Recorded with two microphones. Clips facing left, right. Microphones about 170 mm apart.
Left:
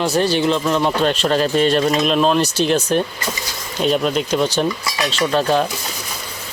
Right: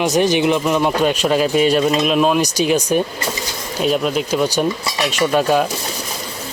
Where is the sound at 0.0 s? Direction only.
20° right (ahead or behind).